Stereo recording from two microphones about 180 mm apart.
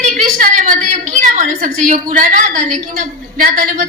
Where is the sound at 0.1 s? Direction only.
45° right (ahead or behind).